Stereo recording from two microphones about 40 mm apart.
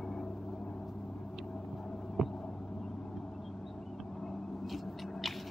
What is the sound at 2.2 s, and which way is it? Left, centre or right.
Heart sounds, centre.